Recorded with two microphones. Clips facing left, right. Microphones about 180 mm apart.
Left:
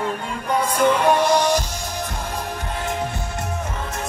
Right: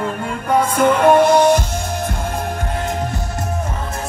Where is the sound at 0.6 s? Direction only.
50° right (ahead or behind).